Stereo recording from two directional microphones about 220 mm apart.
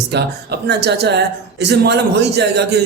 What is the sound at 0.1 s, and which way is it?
Speech, 50° right (ahead or behind).